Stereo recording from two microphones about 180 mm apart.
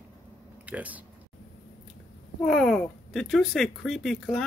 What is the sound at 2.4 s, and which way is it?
Speech, 5° left (ahead or behind).